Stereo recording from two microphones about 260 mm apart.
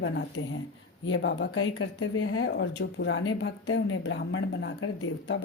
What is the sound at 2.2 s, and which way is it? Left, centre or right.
Speech, left.